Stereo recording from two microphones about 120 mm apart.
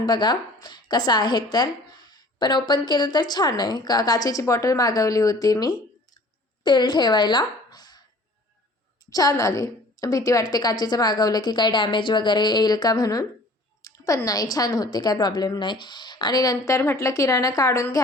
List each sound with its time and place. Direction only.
0.0 s a woman's voice: 35° left (ahead or behind)
9.0 s a woman's voice: 30° left (ahead or behind)